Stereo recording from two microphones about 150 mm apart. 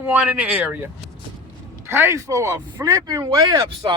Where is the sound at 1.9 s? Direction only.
15° right (ahead or behind).